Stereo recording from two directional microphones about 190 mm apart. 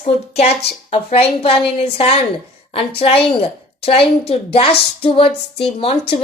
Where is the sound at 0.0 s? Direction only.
35° left (ahead or behind).